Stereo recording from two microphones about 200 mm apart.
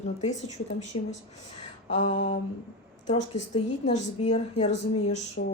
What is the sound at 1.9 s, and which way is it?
A woman's voice, 40° left (ahead or behind).